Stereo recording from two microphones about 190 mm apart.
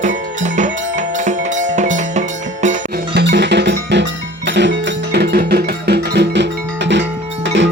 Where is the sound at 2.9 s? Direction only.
60° right (ahead or behind).